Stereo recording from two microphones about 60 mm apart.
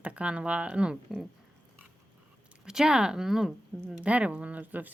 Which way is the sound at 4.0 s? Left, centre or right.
Right.